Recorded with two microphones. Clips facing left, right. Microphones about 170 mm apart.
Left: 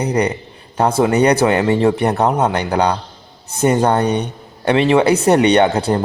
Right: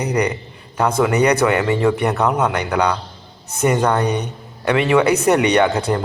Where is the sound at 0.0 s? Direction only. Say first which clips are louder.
Left 2 dB; 30° left (ahead or behind).